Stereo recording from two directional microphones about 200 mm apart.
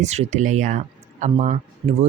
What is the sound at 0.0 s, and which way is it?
Speech, 35° right (ahead or behind).